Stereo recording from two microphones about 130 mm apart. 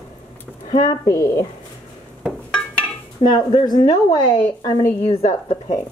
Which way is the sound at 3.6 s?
35° left (ahead or behind).